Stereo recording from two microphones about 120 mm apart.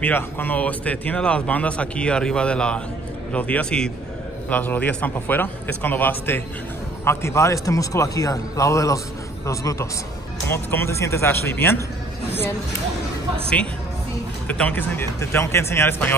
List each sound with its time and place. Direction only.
0.0 s speech: 15° left (ahead or behind)
14.5 s speech: 15° left (ahead or behind)